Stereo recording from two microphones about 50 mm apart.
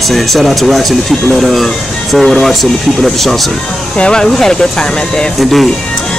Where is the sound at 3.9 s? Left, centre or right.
Centre.